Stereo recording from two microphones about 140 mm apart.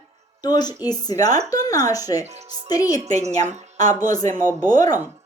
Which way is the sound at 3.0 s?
55° right (ahead or behind).